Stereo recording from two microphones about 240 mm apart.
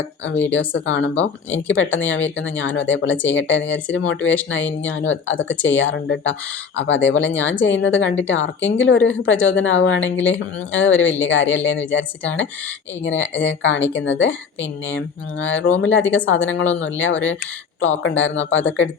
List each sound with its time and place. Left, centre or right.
0.7 s speech: left